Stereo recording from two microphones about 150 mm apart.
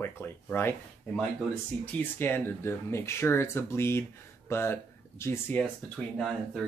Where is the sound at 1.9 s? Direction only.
15° left (ahead or behind).